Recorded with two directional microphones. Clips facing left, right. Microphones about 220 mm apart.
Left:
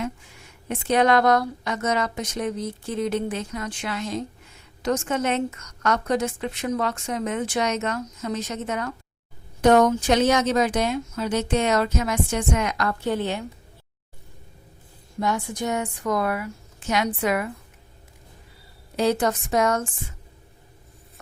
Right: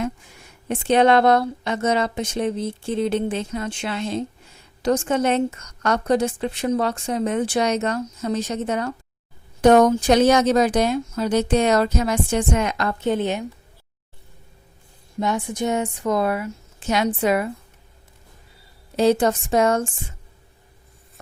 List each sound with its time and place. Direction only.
0.7 s a woman's voice: 30° right (ahead or behind)
15.2 s speech: 20° right (ahead or behind)
18.9 s speech: 25° right (ahead or behind)